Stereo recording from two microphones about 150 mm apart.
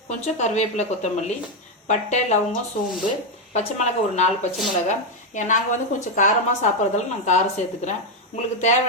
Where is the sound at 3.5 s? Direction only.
50° left (ahead or behind).